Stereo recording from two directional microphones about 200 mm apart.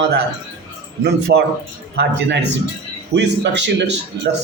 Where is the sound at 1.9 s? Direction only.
60° right (ahead or behind).